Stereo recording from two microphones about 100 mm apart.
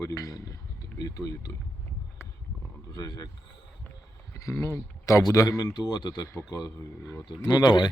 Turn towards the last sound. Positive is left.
turn(degrees=50)  # may be behind; listen again after turning